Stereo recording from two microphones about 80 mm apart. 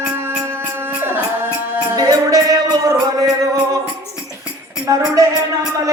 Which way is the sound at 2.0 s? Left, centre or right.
Right.